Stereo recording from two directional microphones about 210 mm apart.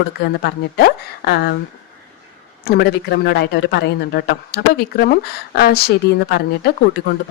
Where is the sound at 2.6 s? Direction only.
50° left (ahead or behind).